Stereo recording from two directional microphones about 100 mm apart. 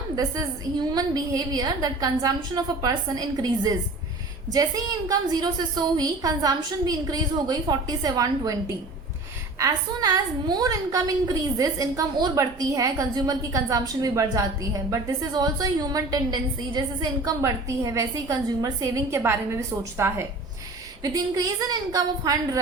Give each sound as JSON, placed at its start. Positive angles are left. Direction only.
{"t": 0.8, "sound": "a woman's voice", "side_deg": -40}
{"t": 9.6, "sound": "a woman's voice", "side_deg": -35}
{"t": 21.0, "sound": "a woman's voice", "side_deg": -35}